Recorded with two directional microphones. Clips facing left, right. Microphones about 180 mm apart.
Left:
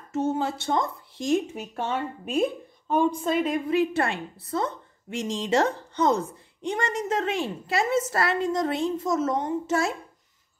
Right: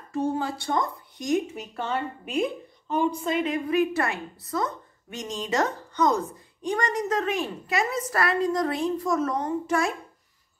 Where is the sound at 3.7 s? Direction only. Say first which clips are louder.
Right 1 dB; 30° left (ahead or behind).